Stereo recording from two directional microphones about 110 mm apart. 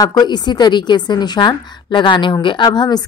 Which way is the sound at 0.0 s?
40° left (ahead or behind).